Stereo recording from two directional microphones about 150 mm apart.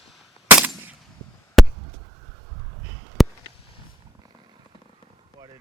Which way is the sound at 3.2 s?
Centre (ahead or behind).